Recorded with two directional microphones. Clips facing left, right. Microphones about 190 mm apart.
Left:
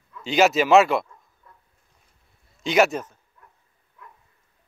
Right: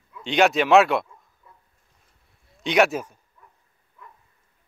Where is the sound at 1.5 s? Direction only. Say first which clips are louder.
Even; 5° right (ahead or behind).